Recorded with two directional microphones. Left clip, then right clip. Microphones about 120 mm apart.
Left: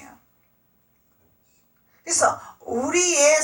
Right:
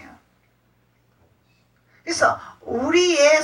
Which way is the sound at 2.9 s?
55° left (ahead or behind).